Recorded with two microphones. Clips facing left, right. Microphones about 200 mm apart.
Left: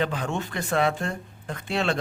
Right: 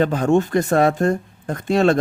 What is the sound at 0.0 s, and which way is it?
Speech, 45° right (ahead or behind).